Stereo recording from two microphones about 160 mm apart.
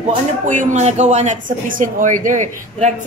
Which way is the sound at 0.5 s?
50° right (ahead or behind).